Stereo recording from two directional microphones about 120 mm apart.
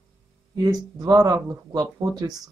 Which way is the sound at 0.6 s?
30° right (ahead or behind).